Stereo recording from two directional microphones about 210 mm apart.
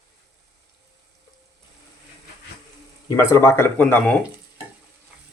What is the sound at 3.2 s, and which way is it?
Speech, 15° left (ahead or behind).